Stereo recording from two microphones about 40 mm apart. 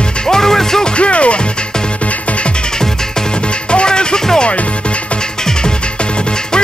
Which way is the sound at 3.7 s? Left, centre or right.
Left.